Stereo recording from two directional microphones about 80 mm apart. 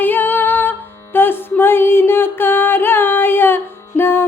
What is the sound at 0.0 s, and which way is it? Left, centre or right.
Music, left.